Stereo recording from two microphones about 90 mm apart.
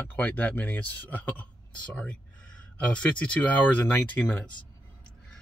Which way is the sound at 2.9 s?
15° left (ahead or behind).